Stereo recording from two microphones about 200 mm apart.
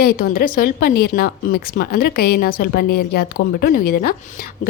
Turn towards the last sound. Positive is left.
turn(degrees=50)  # may be behind; listen again after turning